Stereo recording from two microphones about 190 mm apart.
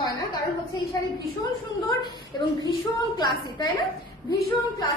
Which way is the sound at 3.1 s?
20° left (ahead or behind).